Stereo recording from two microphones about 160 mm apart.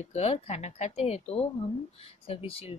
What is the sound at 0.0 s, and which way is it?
Speech, 40° left (ahead or behind).